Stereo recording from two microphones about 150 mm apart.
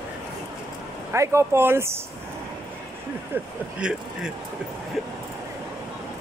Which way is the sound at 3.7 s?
5° right (ahead or behind).